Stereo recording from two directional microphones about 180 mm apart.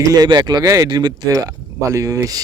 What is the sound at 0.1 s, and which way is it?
Speech, 25° right (ahead or behind).